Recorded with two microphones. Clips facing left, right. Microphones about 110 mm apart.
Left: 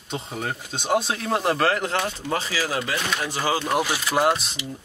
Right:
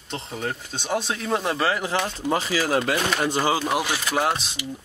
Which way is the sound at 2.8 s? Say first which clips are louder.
Right 4 dB; 55° right (ahead or behind).